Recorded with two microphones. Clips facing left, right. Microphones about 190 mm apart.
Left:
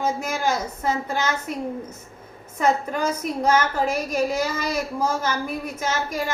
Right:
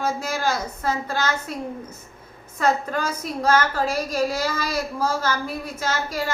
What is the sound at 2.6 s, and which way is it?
A woman's voice, 20° left (ahead or behind).